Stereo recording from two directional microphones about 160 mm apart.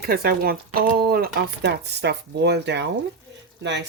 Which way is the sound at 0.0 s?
75° right (ahead or behind).